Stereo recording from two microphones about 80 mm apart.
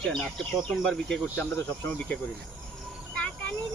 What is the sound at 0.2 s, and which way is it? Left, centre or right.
Speech, centre.